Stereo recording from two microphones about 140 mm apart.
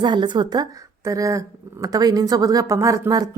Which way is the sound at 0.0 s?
30° right (ahead or behind).